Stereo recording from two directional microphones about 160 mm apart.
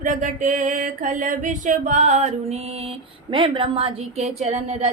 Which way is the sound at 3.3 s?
35° right (ahead or behind).